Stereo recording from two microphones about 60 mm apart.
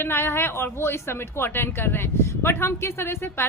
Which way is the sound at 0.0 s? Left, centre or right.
Left.